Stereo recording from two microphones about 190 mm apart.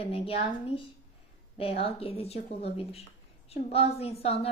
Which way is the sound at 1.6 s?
30° left (ahead or behind).